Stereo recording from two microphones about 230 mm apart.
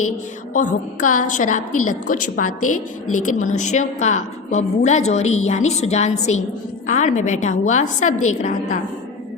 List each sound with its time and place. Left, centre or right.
0.5 s a woman's voice: left
2.6 s a woman's voice: left
3.3 s a woman's voice: left